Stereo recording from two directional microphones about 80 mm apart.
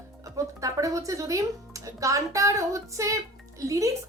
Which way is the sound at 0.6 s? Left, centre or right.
Right.